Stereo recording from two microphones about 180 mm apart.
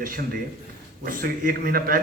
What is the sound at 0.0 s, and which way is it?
A man's voice, 50° right (ahead or behind).